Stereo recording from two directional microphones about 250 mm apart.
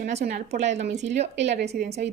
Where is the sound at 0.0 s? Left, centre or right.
Right.